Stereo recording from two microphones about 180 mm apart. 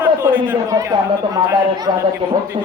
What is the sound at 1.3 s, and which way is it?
A man's voice, 20° right (ahead or behind).